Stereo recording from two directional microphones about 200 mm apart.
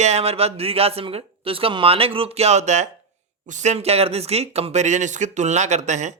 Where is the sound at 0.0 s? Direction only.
35° right (ahead or behind).